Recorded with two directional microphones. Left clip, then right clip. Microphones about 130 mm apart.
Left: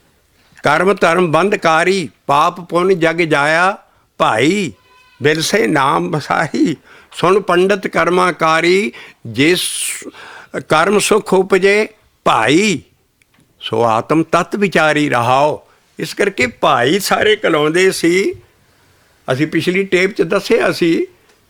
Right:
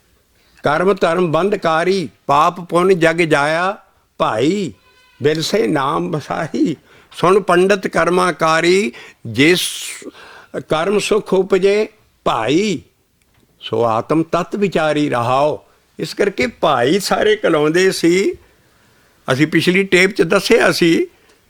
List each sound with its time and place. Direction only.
0.5 s a man's voice: 35° left (ahead or behind)
2.3 s speech: 15° left (ahead or behind)
3.5 s a man's voice: 40° left (ahead or behind)
6.0 s speech: 60° left (ahead or behind)
7.1 s speech: 25° left (ahead or behind)
9.8 s a man's voice: 35° left (ahead or behind)
19.2 s speech: 5° right (ahead or behind)